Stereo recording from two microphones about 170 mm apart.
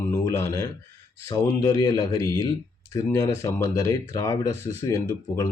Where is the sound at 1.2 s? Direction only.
20° left (ahead or behind).